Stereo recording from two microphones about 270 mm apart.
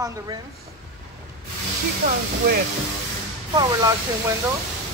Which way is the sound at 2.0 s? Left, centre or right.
Right.